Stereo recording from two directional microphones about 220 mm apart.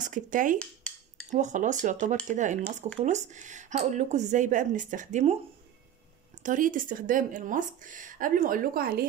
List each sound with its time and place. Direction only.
0.0 s speech: 35° right (ahead or behind)
6.4 s speech: 35° right (ahead or behind)